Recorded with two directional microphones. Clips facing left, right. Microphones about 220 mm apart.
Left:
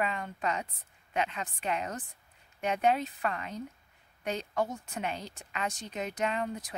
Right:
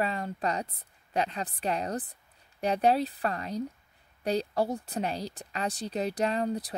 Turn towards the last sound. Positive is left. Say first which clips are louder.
# right 4 dB
turn(degrees=-35)  # may be behind; listen again after turning